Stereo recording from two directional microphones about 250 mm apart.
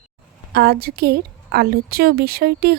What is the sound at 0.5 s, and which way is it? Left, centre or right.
Speech, right.